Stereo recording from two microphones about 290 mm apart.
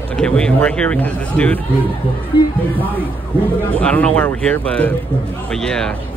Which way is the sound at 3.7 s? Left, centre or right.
Centre.